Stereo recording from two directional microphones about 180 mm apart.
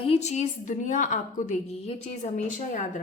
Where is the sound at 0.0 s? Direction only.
35° left (ahead or behind).